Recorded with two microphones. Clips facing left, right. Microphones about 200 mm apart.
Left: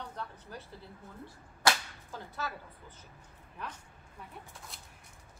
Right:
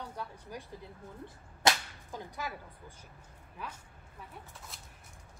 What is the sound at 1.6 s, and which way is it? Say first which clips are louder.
Whip: even; 25° right (ahead or behind).